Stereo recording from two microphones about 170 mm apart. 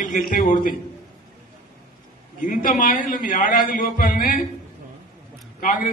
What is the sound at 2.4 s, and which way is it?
A man's voice, 50° left (ahead or behind).